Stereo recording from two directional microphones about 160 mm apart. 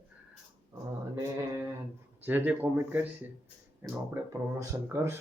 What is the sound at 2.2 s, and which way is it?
Speech, 10° right (ahead or behind).